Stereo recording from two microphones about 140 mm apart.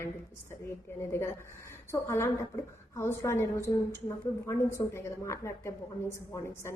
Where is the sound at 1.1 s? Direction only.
20° left (ahead or behind).